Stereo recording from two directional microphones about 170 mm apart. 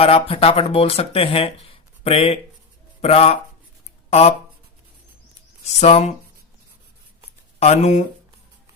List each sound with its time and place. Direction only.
0.0 s speech: 35° left (ahead or behind)
5.6 s speech: 40° left (ahead or behind)
7.6 s speech: 40° left (ahead or behind)